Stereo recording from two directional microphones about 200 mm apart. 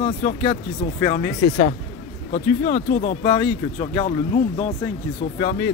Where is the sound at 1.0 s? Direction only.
20° left (ahead or behind).